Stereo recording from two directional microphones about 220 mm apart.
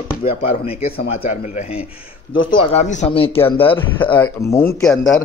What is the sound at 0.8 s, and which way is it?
Speech, 40° left (ahead or behind).